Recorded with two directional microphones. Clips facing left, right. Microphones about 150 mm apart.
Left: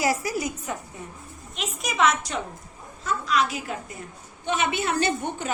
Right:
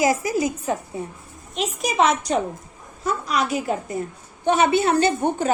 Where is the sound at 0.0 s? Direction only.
20° right (ahead or behind).